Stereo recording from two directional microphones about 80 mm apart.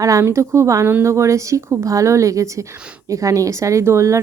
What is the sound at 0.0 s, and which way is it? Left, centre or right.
Speech, right.